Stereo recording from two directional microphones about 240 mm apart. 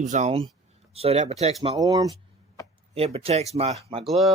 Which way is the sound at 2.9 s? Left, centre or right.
Right.